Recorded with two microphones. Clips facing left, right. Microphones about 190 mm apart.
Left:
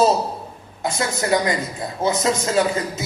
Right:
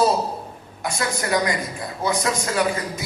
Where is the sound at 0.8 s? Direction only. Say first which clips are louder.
Left 2 dB; 25° left (ahead or behind).